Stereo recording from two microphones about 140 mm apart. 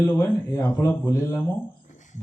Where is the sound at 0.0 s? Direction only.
20° left (ahead or behind).